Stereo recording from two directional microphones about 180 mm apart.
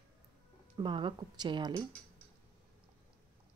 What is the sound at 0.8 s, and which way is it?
Speech, 25° right (ahead or behind).